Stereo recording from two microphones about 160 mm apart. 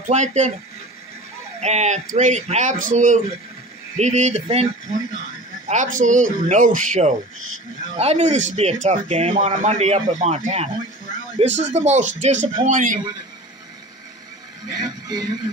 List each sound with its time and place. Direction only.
0.1 s speech: 45° right (ahead or behind)
1.6 s speech: 45° right (ahead or behind)
14.7 s speech: 25° right (ahead or behind)